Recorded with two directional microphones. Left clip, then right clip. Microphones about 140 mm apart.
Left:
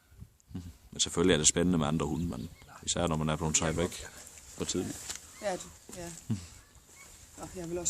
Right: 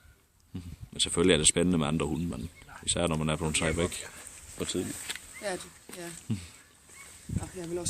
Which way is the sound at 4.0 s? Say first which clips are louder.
Right 3 dB; 55° left (ahead or behind).